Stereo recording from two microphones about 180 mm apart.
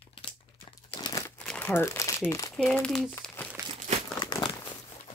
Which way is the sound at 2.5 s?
5° left (ahead or behind).